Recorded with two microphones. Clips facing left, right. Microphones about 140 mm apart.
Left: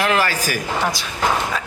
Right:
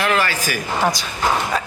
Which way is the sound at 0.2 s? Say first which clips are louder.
Left 1 dB; 40° left (ahead or behind).